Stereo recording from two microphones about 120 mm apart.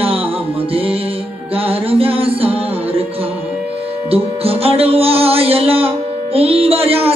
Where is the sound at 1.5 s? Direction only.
50° right (ahead or behind).